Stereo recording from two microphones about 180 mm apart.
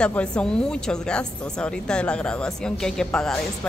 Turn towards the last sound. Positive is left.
turn(degrees=5)  # may be behind; listen again after turning